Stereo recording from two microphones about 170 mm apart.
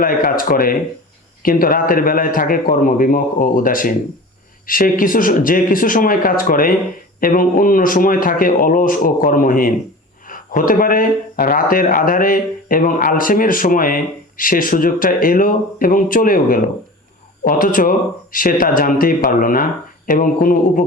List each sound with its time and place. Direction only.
0.0 s speech: 55° left (ahead or behind)